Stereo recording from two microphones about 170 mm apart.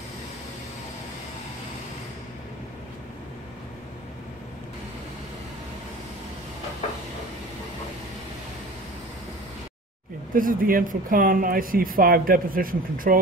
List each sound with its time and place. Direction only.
10.3 s speech: 55° right (ahead or behind)